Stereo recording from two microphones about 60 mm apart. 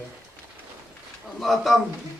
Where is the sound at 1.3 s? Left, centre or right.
Centre.